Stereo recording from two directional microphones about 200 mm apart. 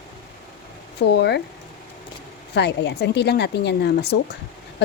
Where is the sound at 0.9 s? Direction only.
55° left (ahead or behind).